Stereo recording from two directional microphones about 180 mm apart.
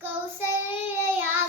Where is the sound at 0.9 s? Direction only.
10° right (ahead or behind).